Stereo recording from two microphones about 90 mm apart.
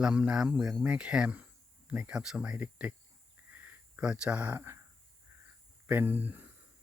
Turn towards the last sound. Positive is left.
turn(degrees=-20)  # may be behind; listen again after turning